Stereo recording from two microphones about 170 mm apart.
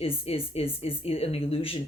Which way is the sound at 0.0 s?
35° left (ahead or behind).